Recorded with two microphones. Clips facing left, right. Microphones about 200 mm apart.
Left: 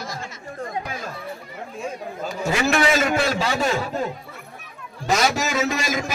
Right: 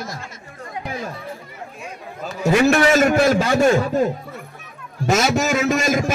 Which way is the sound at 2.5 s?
50° right (ahead or behind).